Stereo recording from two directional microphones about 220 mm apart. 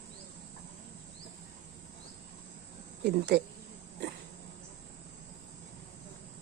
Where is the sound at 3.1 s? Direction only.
45° right (ahead or behind).